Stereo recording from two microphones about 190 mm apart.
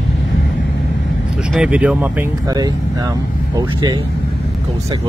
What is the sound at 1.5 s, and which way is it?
Speech, 5° right (ahead or behind).